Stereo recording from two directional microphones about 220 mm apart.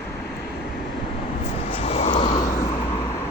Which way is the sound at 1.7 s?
30° left (ahead or behind).